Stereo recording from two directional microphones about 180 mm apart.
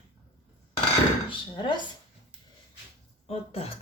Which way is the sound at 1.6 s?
25° left (ahead or behind).